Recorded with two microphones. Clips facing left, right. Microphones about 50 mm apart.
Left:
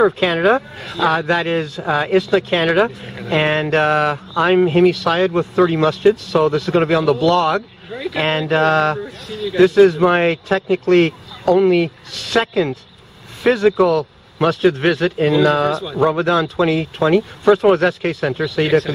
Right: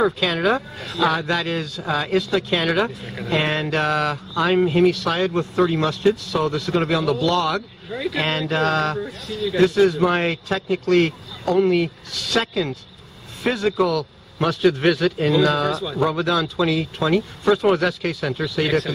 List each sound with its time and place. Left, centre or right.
0.2 s speech: left
1.1 s speech: left
6.3 s speech: left
6.8 s speech: left
7.1 s speech: left
7.9 s speech: centre
8.2 s speech: left
9.3 s speech: centre
9.9 s a man's voice: left
16.1 s speech: left